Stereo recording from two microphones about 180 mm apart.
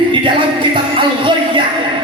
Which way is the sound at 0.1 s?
25° right (ahead or behind).